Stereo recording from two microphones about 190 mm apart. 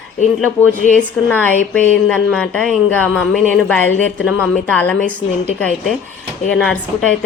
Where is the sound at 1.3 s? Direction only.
10° left (ahead or behind).